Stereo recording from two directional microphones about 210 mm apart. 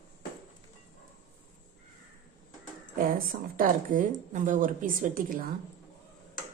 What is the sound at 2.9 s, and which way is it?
A woman's voice, 40° right (ahead or behind).